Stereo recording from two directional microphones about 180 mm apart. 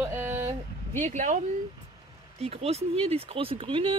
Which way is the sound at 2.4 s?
35° right (ahead or behind).